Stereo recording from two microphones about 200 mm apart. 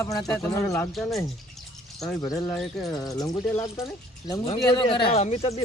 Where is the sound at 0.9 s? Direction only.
Centre (ahead or behind).